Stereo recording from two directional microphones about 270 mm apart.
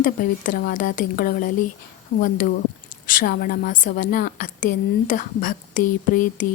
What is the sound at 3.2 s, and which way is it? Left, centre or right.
A woman's voice, left.